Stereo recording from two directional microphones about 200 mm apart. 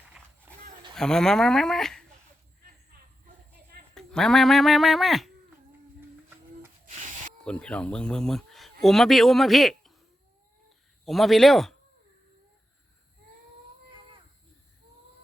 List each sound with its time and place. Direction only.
0.5 s a sound: 10° right (ahead or behind)
0.9 s speech: 5° left (ahead or behind)
3.9 s speech: 5° left (ahead or behind)
6.8 s spray: 40° right (ahead or behind)
7.4 s speech: 5° left (ahead or behind)
11.0 s speech: centre (ahead or behind)